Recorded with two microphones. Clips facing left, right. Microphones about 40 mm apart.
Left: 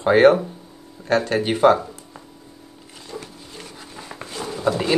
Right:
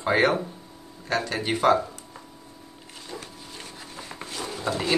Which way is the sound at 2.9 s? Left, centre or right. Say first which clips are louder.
Left 4 dB; centre.